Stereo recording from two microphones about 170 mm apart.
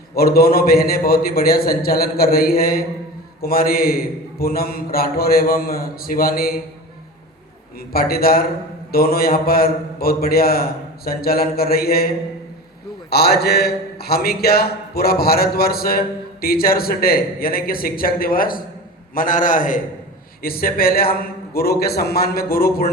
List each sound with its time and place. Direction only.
0.1 s a man's voice: 65° left (ahead or behind)
7.9 s a man's voice: 60° left (ahead or behind)